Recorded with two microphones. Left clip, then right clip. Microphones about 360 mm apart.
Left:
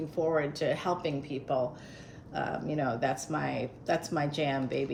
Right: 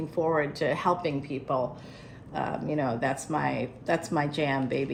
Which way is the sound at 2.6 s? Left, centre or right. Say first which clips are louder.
Right 2 dB; centre.